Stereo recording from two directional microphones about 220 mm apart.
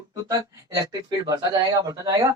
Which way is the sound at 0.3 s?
15° right (ahead or behind).